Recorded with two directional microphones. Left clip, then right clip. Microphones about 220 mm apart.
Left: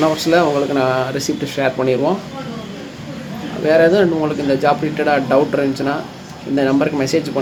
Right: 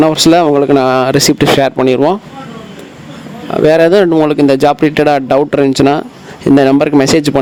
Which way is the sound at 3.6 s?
50° right (ahead or behind).